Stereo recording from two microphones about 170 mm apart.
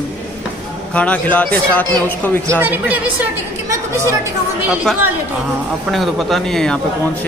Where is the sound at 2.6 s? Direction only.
10° right (ahead or behind).